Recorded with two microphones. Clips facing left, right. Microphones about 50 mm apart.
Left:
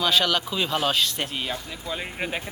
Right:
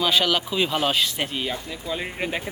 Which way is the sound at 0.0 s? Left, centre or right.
Centre.